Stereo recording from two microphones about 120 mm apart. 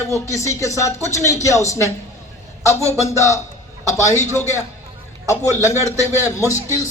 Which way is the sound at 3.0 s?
25° left (ahead or behind).